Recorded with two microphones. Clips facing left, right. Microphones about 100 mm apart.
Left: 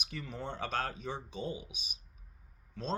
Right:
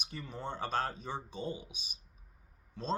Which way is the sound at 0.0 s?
35° right (ahead or behind).